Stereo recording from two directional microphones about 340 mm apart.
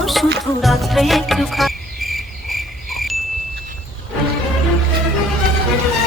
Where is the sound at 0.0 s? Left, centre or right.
Centre.